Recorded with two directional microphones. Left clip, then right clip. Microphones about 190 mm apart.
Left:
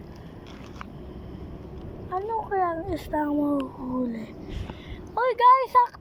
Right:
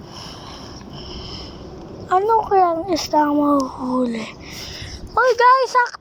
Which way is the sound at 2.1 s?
15° right (ahead or behind).